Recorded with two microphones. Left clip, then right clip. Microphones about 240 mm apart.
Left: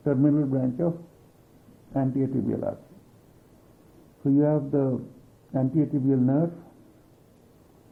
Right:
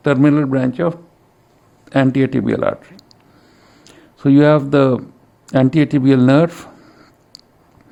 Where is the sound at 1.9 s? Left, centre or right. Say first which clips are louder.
Right 12 dB; right.